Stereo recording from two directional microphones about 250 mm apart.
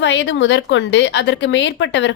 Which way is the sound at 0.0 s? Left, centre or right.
Left.